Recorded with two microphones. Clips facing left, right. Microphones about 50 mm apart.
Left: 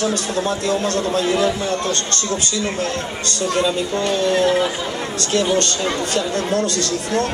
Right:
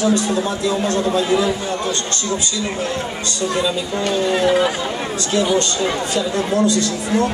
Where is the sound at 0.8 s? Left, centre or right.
Centre.